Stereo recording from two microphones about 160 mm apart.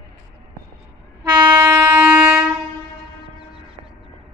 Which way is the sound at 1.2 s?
25° right (ahead or behind).